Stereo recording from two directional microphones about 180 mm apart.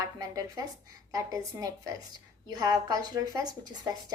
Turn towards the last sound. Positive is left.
turn(degrees=-20)  # may be behind; listen again after turning